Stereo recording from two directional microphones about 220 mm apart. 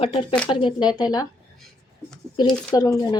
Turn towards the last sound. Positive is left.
turn(degrees=15)  # may be behind; listen again after turning